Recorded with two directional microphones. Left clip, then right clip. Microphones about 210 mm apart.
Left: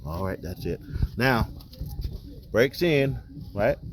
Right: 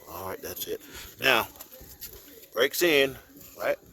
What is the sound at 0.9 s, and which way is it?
Speech, 30° right (ahead or behind).